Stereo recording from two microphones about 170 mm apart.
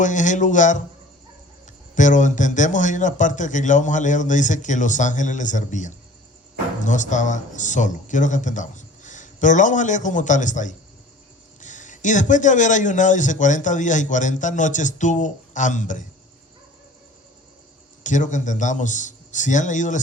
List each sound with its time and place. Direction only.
0.0 s a man's voice: 45° left (ahead or behind)
2.0 s a man's voice: 45° left (ahead or behind)
18.0 s a man's voice: 45° left (ahead or behind)